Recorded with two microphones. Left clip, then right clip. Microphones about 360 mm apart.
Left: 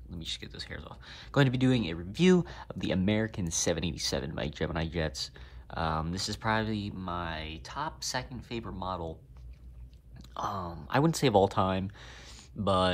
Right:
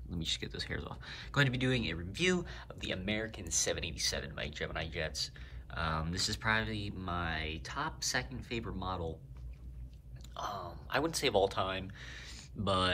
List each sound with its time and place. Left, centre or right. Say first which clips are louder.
0.1 s speech: right 2 dB; centre
10.3 s speech: left 5 dB; centre